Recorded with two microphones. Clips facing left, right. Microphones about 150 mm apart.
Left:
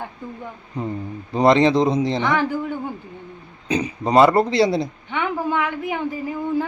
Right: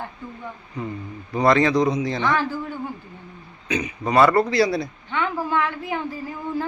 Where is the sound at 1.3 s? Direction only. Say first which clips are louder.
Left 3 dB; 25° left (ahead or behind).